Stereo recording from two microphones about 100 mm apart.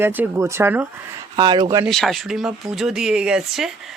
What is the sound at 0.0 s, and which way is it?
Speech, 20° right (ahead or behind).